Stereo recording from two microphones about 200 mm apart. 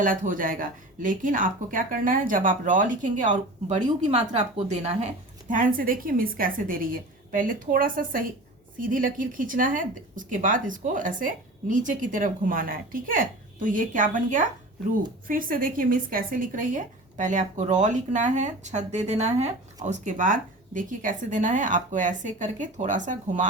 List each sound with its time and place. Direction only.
0.0 s a woman's voice: 40° right (ahead or behind)